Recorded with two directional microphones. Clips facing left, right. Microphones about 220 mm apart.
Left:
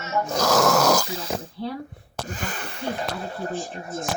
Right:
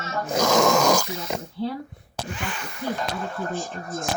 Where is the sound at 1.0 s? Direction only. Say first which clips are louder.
Even; 30° left (ahead or behind).